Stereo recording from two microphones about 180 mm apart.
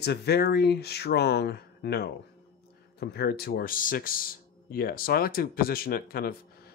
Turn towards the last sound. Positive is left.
turn(degrees=60)  # may be behind; listen again after turning